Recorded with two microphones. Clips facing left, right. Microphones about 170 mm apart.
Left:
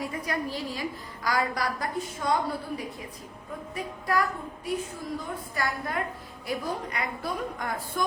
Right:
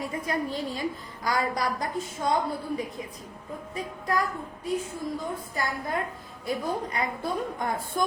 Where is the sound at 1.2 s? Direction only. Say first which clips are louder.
Right 1 dB; 25° right (ahead or behind).